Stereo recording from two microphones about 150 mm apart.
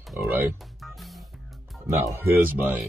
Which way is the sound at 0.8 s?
Centre (ahead or behind).